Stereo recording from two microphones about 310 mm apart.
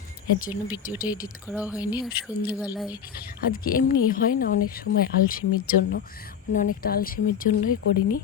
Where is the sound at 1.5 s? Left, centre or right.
Centre.